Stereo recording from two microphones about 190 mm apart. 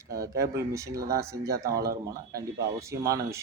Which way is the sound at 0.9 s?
55° right (ahead or behind).